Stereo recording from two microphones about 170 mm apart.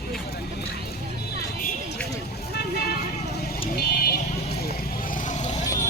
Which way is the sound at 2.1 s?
70° left (ahead or behind).